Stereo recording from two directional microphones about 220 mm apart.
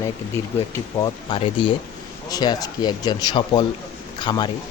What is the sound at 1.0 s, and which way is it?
Speech, 20° left (ahead or behind).